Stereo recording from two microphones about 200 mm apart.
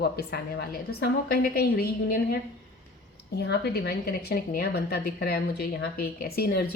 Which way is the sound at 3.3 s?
55° left (ahead or behind).